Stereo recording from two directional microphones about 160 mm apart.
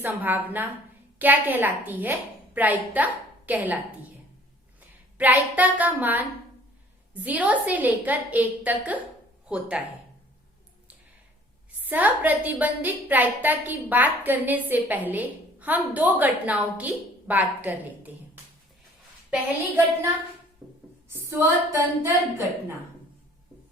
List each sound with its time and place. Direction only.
0.0 s a woman's voice: 10° right (ahead or behind)
5.1 s a woman's voice: 10° right (ahead or behind)
11.9 s a woman's voice: 10° right (ahead or behind)
21.1 s a woman's voice: 15° right (ahead or behind)